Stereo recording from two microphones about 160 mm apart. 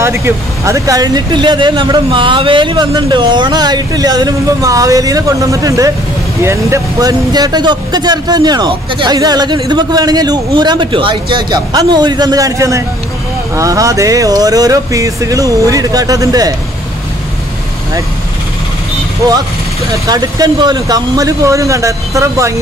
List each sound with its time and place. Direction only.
0.0 s speech: 15° right (ahead or behind)
19.2 s speech: 20° right (ahead or behind)